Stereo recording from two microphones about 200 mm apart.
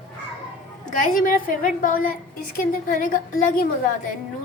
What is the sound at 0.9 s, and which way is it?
A woman's voice, 40° left (ahead or behind).